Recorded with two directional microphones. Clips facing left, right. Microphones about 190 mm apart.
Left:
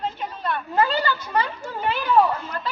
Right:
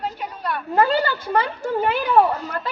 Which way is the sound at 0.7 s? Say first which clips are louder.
Right 4 dB; 50° right (ahead or behind).